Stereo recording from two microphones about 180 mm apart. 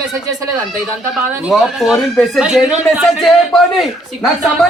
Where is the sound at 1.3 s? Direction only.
5° right (ahead or behind).